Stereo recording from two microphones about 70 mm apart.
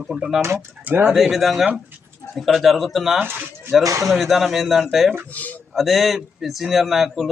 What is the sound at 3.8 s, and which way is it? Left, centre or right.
Speech, right.